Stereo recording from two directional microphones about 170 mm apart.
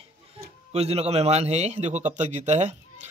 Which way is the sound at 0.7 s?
40° right (ahead or behind).